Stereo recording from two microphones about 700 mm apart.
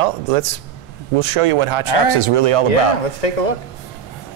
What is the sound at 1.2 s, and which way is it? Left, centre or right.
Speech, right.